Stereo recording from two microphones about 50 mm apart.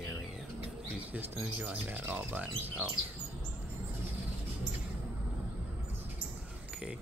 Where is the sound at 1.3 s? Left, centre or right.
Right.